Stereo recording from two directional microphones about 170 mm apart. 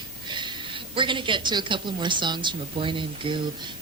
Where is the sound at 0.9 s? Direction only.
30° right (ahead or behind).